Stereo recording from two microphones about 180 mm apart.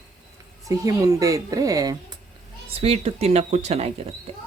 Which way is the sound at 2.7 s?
35° right (ahead or behind).